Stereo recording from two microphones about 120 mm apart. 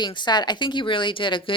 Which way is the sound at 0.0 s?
40° left (ahead or behind).